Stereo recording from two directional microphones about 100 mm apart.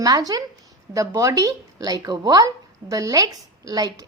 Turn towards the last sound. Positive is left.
turn(degrees=-40)  # may be behind; listen again after turning